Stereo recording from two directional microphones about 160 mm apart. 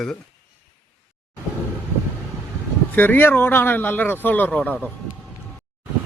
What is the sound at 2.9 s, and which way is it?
Speech, 10° left (ahead or behind).